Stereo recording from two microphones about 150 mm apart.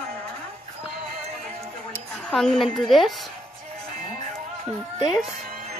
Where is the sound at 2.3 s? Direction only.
5° left (ahead or behind).